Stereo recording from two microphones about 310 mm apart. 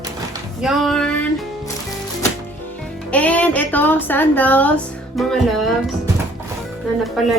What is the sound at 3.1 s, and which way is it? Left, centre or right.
A woman's voice, centre.